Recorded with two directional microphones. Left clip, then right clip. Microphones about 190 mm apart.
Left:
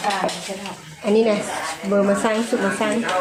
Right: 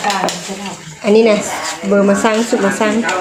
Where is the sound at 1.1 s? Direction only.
20° right (ahead or behind).